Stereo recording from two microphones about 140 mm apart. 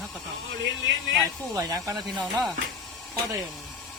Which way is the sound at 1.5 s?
25° right (ahead or behind).